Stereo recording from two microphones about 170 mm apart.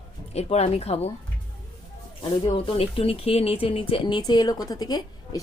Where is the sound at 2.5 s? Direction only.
30° left (ahead or behind).